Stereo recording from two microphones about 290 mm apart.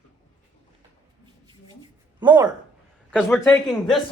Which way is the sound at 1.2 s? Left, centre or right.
Centre.